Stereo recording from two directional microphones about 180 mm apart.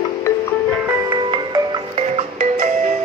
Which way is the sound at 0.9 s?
20° right (ahead or behind).